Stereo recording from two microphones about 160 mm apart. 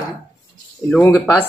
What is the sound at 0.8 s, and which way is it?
Speech, 15° left (ahead or behind).